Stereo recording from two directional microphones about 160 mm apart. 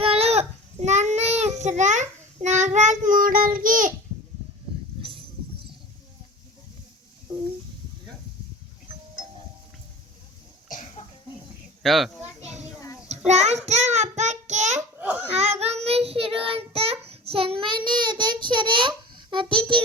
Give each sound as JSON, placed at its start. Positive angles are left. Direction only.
{"t": 0.0, "sound": "child singing", "side_deg": -40}
{"t": 7.3, "sound": "a sound", "side_deg": -25}
{"t": 11.8, "sound": "a child's voice", "side_deg": 0}
{"t": 13.1, "sound": "child singing", "side_deg": -45}
{"t": 13.7, "sound": "a child's voice", "side_deg": -45}
{"t": 14.8, "sound": "a sound", "side_deg": -10}
{"t": 15.3, "sound": "child singing", "side_deg": -40}